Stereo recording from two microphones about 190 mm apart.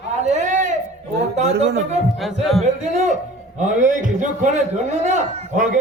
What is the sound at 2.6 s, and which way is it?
A man's voice, 40° right (ahead or behind).